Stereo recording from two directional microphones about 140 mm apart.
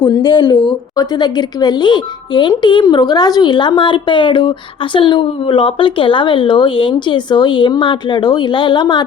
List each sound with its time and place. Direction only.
0.0 s a woman's voice: 35° left (ahead or behind)